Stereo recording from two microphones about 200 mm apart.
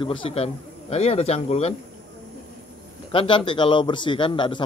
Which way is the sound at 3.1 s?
25° left (ahead or behind).